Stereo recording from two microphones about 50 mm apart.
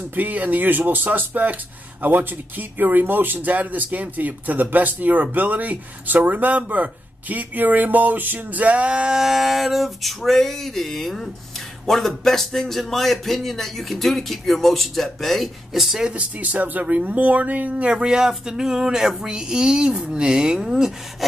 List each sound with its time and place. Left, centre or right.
0.1 s speech: right
9.2 s a man's voice: centre
16.1 s speech: right; by 21.3 s centre